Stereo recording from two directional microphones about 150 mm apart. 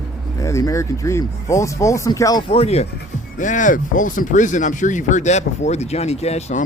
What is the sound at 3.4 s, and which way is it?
Speech, 55° left (ahead or behind).